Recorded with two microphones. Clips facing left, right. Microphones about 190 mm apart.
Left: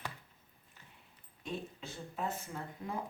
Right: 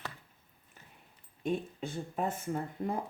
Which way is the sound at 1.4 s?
55° right (ahead or behind).